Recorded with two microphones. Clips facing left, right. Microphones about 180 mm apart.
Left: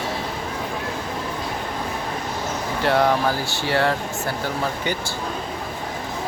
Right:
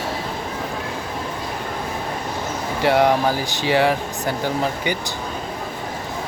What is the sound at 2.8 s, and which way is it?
Speech, 15° right (ahead or behind).